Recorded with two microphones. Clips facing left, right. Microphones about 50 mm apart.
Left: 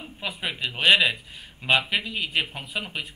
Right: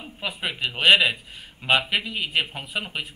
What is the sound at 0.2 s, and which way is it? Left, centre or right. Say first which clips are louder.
Speech: right 2 dB; centre.